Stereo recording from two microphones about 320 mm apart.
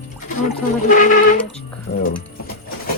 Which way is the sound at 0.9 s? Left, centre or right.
Left.